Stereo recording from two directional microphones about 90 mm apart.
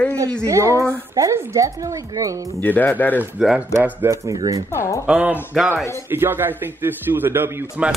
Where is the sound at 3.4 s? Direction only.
Centre (ahead or behind).